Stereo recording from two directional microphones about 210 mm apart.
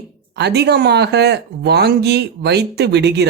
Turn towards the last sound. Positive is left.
turn(degrees=-55)  # may be behind; listen again after turning